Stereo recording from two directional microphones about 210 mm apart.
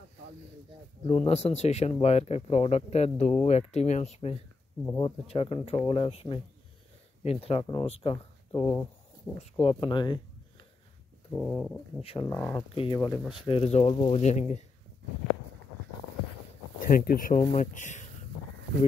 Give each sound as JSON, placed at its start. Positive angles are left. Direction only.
{"t": 1.0, "sound": "speech", "side_deg": 30}
{"t": 4.8, "sound": "speech", "side_deg": 15}
{"t": 5.2, "sound": "speech", "side_deg": 30}
{"t": 11.3, "sound": "bird", "side_deg": 5}
{"t": 12.0, "sound": "speech", "side_deg": 25}
{"t": 12.3, "sound": "speech", "side_deg": 10}
{"t": 12.7, "sound": "speech", "side_deg": 25}
{"t": 16.8, "sound": "speech", "side_deg": 45}